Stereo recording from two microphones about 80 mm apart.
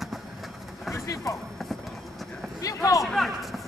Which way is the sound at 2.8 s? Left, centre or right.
Left.